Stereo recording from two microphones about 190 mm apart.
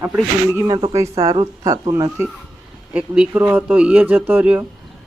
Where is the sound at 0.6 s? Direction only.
20° right (ahead or behind).